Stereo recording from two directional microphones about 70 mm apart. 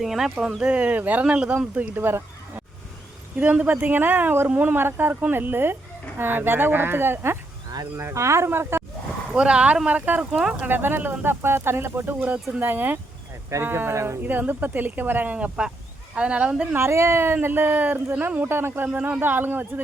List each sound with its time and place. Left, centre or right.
0.0 s speech: centre
2.0 s a sound: right
3.3 s speech: centre
9.3 s speech: centre
10.7 s speech: right
13.5 s speech: right
14.2 s speech: right
16.7 s speech: right
18.9 s speech: right